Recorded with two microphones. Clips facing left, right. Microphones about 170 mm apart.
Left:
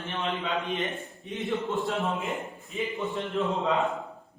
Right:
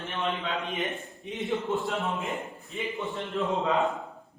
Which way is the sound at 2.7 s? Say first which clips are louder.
Left 2 dB; centre (ahead or behind).